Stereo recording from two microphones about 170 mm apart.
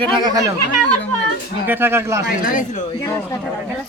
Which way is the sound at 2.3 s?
55° left (ahead or behind).